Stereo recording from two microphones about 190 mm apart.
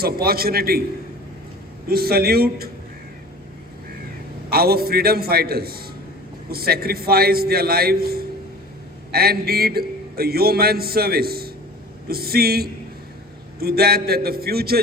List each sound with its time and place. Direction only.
0.0 s a man's voice: 55° right (ahead or behind)
1.9 s a man's voice: 55° right (ahead or behind)
4.4 s a man's voice: 55° right (ahead or behind)